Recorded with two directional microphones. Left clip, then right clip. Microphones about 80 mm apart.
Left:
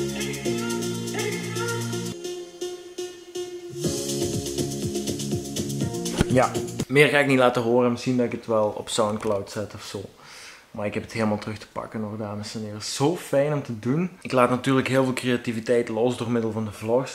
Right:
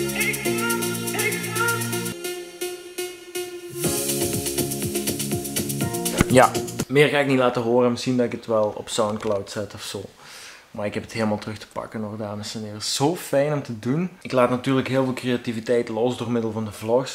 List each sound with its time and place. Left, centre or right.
0.0 s music: centre
6.9 s speech: centre
10.8 s speech: centre